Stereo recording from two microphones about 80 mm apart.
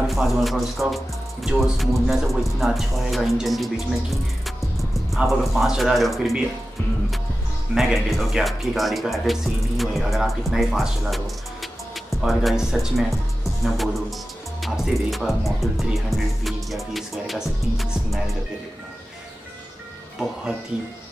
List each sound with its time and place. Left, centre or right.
0.1 s speech: centre
7.7 s speech: centre